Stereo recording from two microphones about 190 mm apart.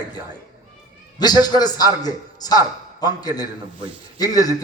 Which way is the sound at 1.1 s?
20° left (ahead or behind).